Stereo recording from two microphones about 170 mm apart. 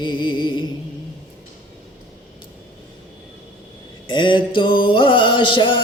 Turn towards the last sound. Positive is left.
turn(degrees=30)  # may be behind; listen again after turning